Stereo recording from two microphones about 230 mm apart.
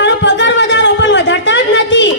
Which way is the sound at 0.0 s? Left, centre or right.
Left.